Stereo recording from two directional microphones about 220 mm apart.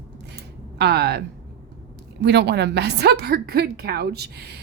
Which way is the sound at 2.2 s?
50° right (ahead or behind).